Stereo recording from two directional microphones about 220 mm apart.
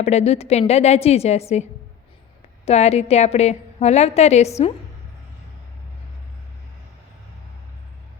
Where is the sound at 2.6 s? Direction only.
30° left (ahead or behind).